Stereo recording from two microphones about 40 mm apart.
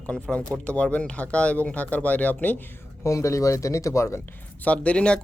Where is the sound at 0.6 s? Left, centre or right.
Left.